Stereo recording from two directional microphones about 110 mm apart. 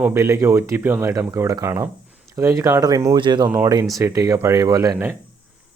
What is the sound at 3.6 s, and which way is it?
Speech, 35° right (ahead or behind).